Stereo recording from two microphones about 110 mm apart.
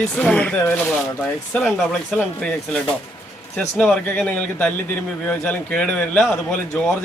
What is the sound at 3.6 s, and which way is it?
Speech, 5° left (ahead or behind).